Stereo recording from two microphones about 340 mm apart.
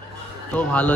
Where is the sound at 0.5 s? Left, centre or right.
Centre.